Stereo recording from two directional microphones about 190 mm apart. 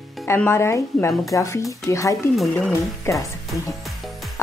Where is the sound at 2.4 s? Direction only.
5° left (ahead or behind).